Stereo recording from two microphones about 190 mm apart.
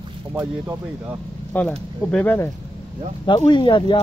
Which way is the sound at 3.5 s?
25° left (ahead or behind).